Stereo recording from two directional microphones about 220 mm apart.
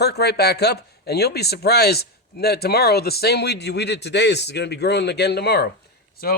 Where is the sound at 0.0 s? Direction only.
50° left (ahead or behind).